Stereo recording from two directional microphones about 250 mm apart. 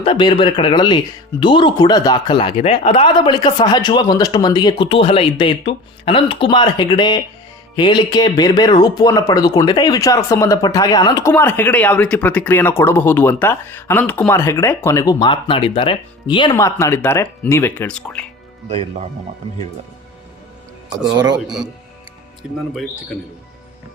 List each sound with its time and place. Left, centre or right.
0.0 s speech: centre
21.4 s speech: centre